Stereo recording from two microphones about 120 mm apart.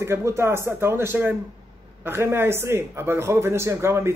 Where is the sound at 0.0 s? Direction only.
20° right (ahead or behind).